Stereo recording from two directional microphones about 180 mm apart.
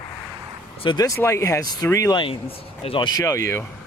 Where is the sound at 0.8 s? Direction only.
25° left (ahead or behind).